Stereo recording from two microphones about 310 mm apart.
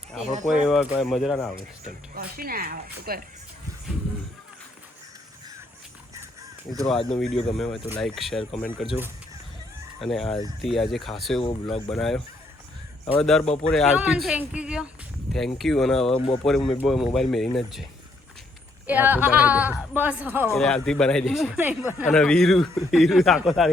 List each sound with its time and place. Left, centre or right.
0.4 s speech: centre
2.1 s speech: right
7.1 s speech: centre
13.4 s speech: left
13.7 s speech: centre
16.1 s speech: centre
16.4 s speech: centre
18.9 s speech: centre